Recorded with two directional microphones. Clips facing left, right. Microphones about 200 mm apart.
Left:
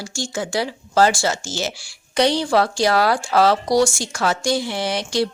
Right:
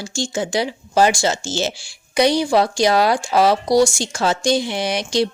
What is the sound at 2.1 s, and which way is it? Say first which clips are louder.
Speech: right 2 dB; 10° right (ahead or behind).